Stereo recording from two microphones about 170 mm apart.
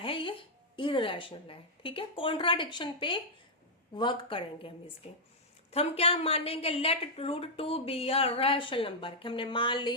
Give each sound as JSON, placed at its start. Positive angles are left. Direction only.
{"t": 0.0, "sound": "a woman's voice", "side_deg": 30}